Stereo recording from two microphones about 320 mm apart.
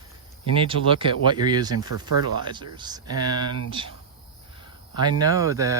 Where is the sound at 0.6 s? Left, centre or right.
Centre.